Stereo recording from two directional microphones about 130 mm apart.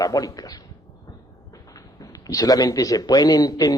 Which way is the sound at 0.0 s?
25° left (ahead or behind).